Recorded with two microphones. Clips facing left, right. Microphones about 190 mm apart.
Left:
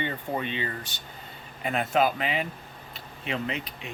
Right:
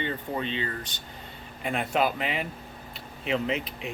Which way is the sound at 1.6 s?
Centre (ahead or behind).